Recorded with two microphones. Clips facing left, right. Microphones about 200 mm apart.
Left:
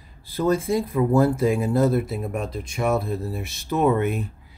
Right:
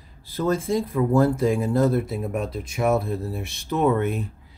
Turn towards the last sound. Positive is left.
turn(degrees=10)  # may be behind; listen again after turning